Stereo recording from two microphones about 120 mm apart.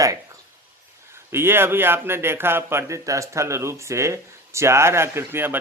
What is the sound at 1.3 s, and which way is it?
A man's voice, 20° right (ahead or behind).